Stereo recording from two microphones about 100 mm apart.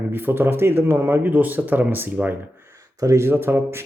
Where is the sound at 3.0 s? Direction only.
30° right (ahead or behind).